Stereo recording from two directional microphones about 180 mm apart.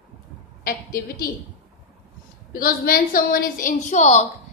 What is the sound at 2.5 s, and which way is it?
A woman's voice, 55° left (ahead or behind).